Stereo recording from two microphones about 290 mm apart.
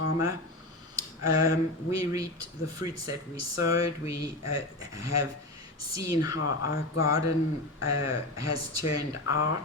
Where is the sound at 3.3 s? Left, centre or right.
Left.